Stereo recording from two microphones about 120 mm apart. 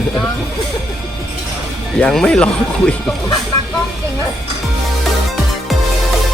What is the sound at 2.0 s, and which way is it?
Speech, 5° left (ahead or behind).